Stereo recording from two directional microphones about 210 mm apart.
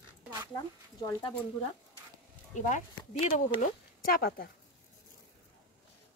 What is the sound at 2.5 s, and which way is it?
A woman's voice, 35° left (ahead or behind).